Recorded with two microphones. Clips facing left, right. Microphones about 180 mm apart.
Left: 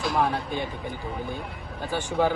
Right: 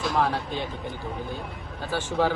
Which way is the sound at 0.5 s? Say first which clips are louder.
Left 1 dB; 55° left (ahead or behind).